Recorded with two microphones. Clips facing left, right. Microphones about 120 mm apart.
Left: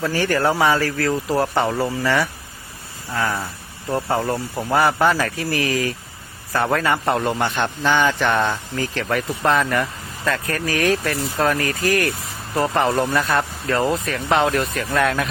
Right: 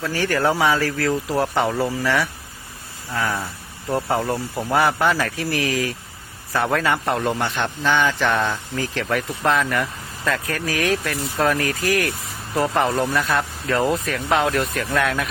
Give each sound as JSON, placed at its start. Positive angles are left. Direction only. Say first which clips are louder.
{"t": 0.0, "sound": "a man's voice", "louder": "left 1 dB", "side_deg": 0}